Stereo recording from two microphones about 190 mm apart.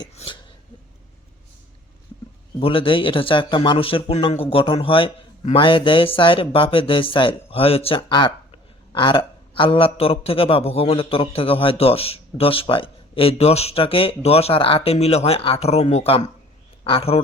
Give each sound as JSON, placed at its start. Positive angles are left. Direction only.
{"t": 2.6, "sound": "a man's voice", "side_deg": 30}